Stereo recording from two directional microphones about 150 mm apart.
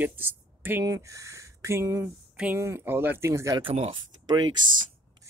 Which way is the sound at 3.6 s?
35° right (ahead or behind).